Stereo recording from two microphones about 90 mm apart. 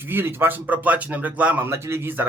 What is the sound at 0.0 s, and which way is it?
Speech, 25° right (ahead or behind).